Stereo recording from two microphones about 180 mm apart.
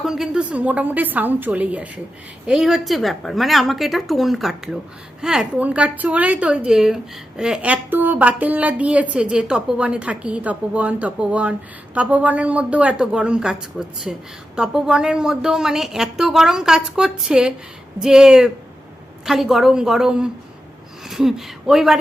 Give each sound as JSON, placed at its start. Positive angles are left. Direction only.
{"t": 0.0, "sound": "a woman's voice", "side_deg": -5}